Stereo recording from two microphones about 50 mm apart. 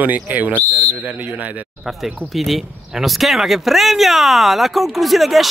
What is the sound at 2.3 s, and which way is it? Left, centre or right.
Speech, centre.